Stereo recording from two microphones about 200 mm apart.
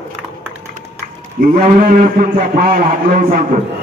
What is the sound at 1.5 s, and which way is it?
A man's voice, 40° right (ahead or behind).